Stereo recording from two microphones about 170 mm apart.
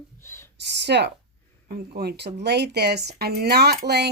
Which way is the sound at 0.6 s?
85° right.